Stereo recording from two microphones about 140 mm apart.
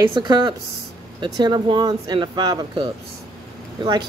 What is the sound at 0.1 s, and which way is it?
Speech, 35° right (ahead or behind).